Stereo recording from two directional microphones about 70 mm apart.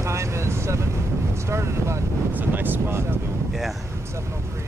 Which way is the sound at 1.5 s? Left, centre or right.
Right.